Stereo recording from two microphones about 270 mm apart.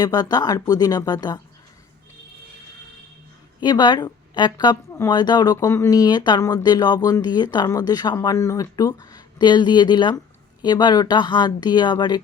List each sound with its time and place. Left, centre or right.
0.0 s a woman's voice: centre
3.6 s a woman's voice: centre